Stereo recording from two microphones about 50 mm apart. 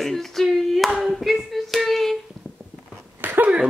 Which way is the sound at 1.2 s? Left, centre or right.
Centre.